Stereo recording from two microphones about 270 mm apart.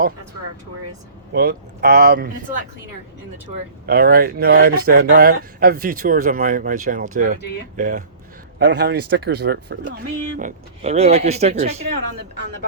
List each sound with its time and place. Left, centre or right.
1.3 s speech: right
3.8 s speech: right
8.5 s speech: right